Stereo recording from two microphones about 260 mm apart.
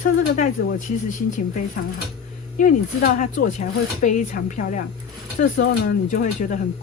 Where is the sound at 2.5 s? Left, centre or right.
Left.